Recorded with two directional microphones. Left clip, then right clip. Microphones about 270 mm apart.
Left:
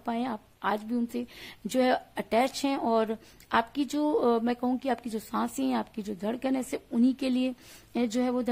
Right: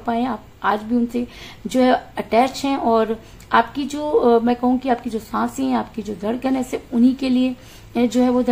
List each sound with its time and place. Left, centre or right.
0.0 s speech: left